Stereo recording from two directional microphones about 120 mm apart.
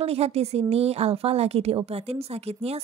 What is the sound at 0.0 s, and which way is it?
A woman's voice, 60° right (ahead or behind).